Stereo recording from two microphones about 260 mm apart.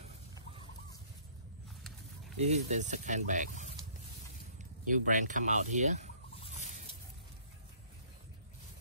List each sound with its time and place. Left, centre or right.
1.8 s a sound: centre
2.3 s speech: right
4.8 s speech: right
6.4 s fowl: left